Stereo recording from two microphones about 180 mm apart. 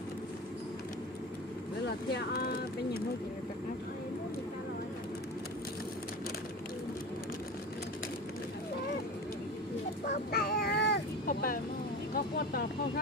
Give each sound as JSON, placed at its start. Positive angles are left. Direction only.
{"t": 2.1, "sound": "speech", "side_deg": 60}
{"t": 10.0, "sound": "vehicle", "side_deg": 60}
{"t": 12.1, "sound": "speech", "side_deg": 55}